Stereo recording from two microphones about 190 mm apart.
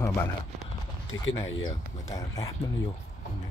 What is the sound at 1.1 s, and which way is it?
Speech, 90° left.